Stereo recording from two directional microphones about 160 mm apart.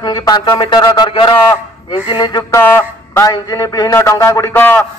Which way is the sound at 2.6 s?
15° left (ahead or behind).